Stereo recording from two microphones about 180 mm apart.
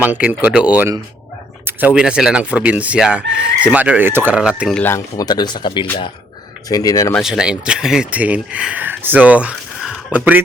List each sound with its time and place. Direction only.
0.0 s speech: 10° right (ahead or behind)
4.8 s speech: 15° left (ahead or behind)
7.2 s speech: 5° right (ahead or behind)